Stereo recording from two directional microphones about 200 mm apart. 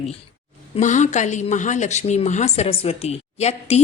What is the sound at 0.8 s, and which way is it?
Speech, 35° left (ahead or behind).